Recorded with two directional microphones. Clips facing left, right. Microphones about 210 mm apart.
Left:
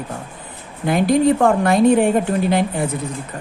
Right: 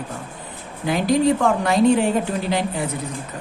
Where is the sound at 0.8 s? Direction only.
55° left (ahead or behind).